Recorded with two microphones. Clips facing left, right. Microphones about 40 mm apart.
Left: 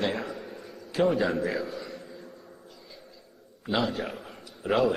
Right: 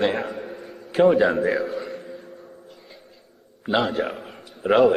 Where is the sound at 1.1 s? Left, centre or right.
Right.